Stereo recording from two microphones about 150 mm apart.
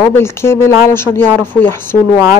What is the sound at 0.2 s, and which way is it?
Speech, 15° left (ahead or behind).